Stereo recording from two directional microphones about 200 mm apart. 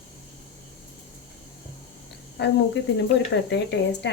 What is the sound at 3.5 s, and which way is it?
Speech, 60° left (ahead or behind).